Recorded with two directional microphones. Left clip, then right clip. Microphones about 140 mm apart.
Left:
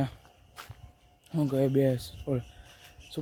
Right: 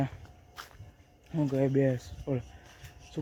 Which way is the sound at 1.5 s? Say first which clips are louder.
Left 2 dB; 30° left (ahead or behind).